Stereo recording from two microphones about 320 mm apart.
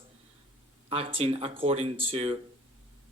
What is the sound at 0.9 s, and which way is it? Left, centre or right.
Speech, centre.